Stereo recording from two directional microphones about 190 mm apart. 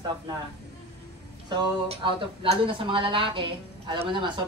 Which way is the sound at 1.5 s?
25° right (ahead or behind).